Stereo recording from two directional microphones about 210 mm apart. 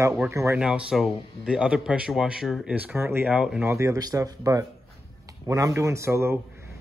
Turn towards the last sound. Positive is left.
turn(degrees=-10)  # may be behind; listen again after turning